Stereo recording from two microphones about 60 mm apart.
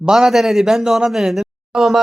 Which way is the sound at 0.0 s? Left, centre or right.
Centre.